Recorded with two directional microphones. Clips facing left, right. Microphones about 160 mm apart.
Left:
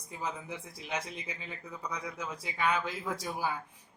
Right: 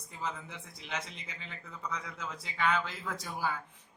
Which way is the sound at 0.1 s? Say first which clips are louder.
Left 2 dB; 10° left (ahead or behind).